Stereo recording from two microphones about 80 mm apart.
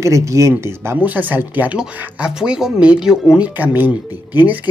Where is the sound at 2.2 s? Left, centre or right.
Centre.